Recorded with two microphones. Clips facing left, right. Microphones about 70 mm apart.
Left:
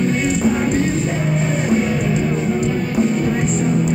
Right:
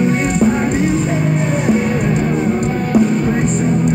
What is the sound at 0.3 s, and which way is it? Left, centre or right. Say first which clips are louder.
Music: right 3 dB; right.